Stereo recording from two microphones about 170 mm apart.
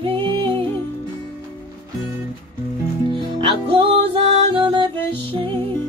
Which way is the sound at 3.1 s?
30° right (ahead or behind).